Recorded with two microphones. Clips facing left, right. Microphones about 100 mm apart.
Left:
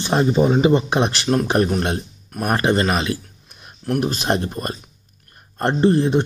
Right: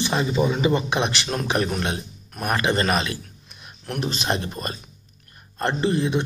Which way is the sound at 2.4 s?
35° left (ahead or behind).